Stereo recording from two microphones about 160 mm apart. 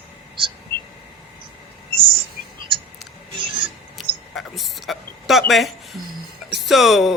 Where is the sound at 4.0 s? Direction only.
Centre (ahead or behind).